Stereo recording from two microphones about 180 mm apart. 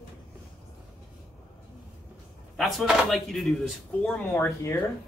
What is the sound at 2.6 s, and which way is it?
Speech, centre (ahead or behind).